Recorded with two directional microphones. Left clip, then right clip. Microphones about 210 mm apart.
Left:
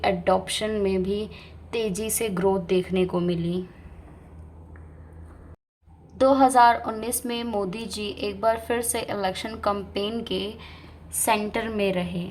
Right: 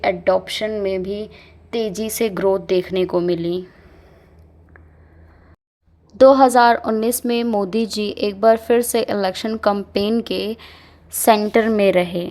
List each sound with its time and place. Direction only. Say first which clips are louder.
0.0 s a woman's voice: right 5 dB; 20° right (ahead or behind)
6.1 s a woman's voice: right 7 dB; 35° right (ahead or behind)